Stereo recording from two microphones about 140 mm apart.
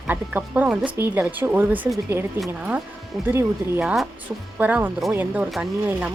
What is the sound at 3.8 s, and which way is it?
Speech, 5° right (ahead or behind).